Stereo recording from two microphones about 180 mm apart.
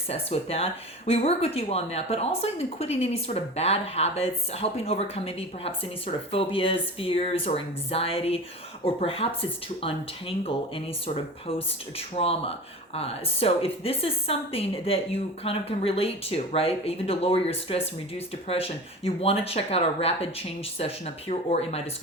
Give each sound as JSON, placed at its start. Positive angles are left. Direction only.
{"t": 0.1, "sound": "speech", "side_deg": 35}